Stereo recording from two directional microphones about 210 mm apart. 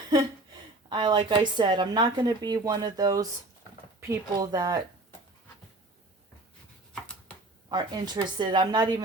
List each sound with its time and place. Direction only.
0.9 s a woman's voice: 20° right (ahead or behind)
7.7 s a woman's voice: 20° right (ahead or behind)